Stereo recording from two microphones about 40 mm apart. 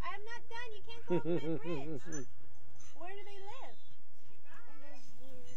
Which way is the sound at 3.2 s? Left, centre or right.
Centre.